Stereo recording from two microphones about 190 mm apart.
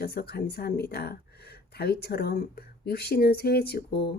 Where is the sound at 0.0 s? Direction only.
55° left (ahead or behind).